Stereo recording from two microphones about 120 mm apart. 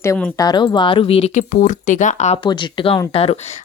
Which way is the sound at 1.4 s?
90° left.